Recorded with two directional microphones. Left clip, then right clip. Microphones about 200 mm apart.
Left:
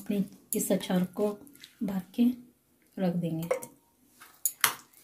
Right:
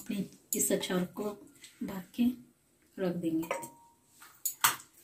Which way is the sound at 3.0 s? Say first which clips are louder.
Left 1 dB; 55° left (ahead or behind).